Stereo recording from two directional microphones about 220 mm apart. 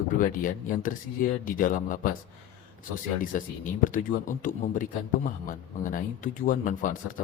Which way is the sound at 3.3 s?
35° left (ahead or behind).